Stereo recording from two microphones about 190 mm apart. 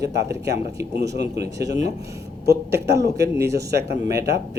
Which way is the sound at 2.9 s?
60° right (ahead or behind).